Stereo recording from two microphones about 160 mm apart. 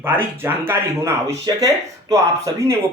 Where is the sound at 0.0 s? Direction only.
15° right (ahead or behind).